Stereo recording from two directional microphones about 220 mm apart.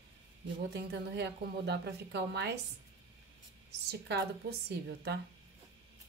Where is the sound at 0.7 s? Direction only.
50° right (ahead or behind).